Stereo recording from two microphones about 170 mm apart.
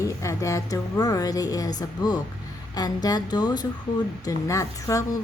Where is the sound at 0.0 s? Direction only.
20° left (ahead or behind).